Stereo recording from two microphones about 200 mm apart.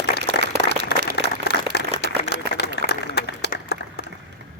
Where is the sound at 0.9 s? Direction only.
55° left (ahead or behind).